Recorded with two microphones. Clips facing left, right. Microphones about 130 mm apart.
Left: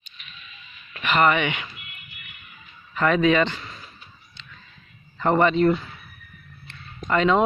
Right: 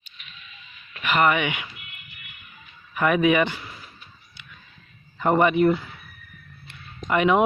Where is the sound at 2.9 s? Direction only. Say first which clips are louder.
Even; 15° right (ahead or behind).